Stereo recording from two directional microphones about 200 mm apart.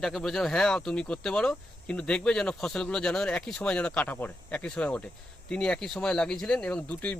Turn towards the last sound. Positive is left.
turn(degrees=5)  # may be behind; listen again after turning